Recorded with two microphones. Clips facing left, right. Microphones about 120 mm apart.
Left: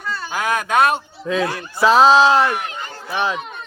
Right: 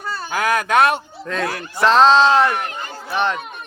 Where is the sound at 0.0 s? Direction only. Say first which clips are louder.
Even; 40° right (ahead or behind).